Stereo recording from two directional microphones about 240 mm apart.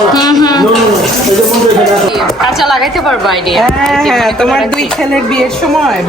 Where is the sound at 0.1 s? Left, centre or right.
Centre.